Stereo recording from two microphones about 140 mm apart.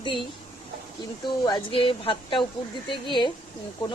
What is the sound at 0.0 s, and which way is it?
Speech, 35° left (ahead or behind).